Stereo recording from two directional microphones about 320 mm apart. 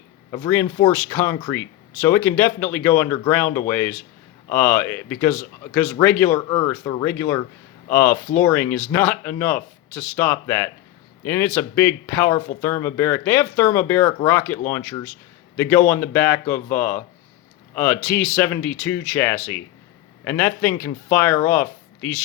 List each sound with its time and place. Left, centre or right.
0.3 s a man's voice: centre